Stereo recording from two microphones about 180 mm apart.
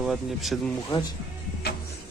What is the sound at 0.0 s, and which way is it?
Speech, centre (ahead or behind).